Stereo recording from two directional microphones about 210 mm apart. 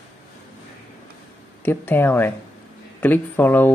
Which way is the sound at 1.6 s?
10° left (ahead or behind).